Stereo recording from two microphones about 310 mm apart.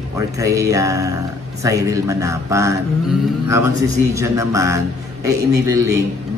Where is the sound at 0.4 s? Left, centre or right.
Centre.